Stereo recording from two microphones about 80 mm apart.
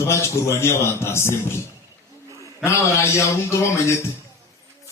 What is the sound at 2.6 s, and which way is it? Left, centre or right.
A man's voice, left.